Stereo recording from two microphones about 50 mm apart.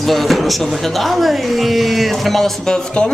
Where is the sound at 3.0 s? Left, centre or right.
Left.